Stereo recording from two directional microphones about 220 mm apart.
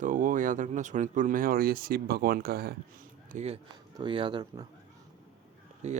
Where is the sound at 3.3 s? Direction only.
30° right (ahead or behind).